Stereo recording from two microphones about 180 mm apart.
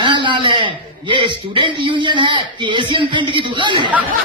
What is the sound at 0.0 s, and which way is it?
A man's voice, 25° right (ahead or behind).